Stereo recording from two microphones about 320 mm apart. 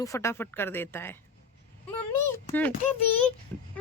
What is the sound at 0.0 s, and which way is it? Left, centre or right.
Speech, centre.